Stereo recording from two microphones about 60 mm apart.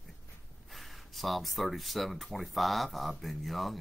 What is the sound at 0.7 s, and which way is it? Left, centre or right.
Speech, centre.